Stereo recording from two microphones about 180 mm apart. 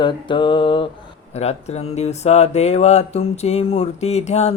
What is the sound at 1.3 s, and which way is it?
Speech, 35° left (ahead or behind).